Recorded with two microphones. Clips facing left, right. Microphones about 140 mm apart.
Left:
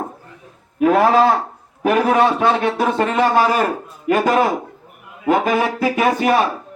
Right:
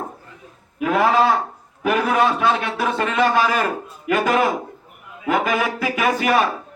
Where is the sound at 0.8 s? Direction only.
45° left (ahead or behind).